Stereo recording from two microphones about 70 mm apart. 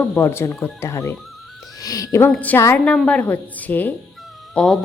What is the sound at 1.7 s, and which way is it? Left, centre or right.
Speech, left.